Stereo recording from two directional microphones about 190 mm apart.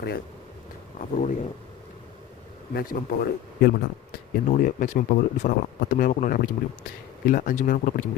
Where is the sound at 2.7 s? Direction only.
55° left (ahead or behind).